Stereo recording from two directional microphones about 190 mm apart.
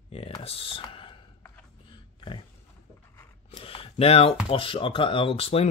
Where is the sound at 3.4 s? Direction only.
30° left (ahead or behind).